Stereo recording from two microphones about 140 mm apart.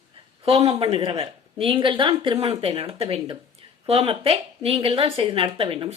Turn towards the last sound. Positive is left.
turn(degrees=-40)  # may be behind; listen again after turning